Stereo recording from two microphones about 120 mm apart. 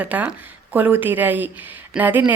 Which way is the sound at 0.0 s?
10° right (ahead or behind).